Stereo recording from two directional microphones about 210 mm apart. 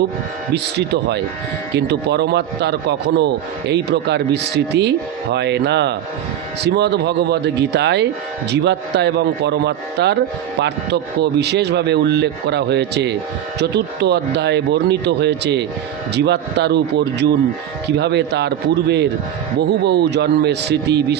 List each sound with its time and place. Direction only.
0.5 s speech: 55° right (ahead or behind)